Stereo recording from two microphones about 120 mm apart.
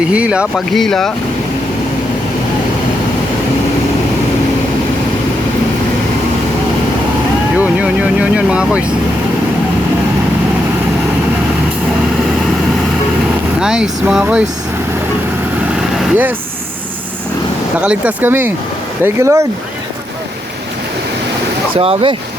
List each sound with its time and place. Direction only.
0.1 s speech: 10° right (ahead or behind)
0.5 s speech: centre (ahead or behind)
7.6 s vehicle: 10° right (ahead or behind)
13.6 s speech: 5° right (ahead or behind)
17.7 s speech: 10° right (ahead or behind)
21.8 s speech: 55° right (ahead or behind)